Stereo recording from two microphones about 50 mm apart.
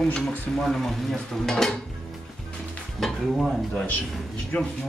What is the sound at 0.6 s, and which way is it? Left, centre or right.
Stir, centre.